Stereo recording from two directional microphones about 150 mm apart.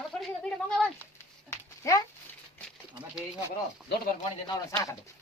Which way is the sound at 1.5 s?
20° left (ahead or behind).